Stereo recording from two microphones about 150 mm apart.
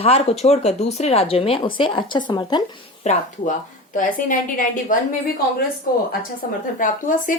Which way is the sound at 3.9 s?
65° left (ahead or behind).